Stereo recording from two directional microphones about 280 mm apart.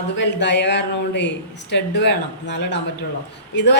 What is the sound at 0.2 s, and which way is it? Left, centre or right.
A woman's voice, left.